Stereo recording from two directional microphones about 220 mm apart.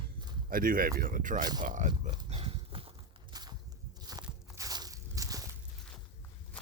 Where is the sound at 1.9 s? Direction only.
20° right (ahead or behind).